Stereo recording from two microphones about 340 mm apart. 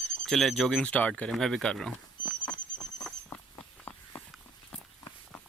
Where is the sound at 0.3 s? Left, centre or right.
Centre.